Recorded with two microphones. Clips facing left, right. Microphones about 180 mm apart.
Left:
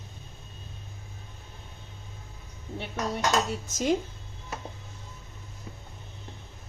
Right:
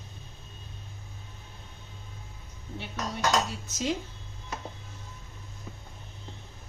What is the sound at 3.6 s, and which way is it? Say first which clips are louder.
Speech: left 5 dB; 50° left (ahead or behind).